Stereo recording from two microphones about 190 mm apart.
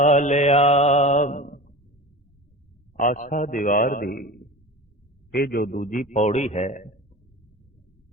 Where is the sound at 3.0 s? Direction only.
45° left (ahead or behind).